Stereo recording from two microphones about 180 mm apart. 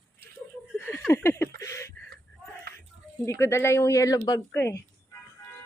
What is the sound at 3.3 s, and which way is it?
Speech, 15° left (ahead or behind).